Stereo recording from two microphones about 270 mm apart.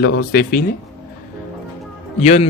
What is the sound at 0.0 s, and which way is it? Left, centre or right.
Speech, left.